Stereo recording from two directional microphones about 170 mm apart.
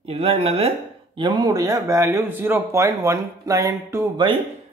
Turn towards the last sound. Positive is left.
turn(degrees=-25)  # may be behind; listen again after turning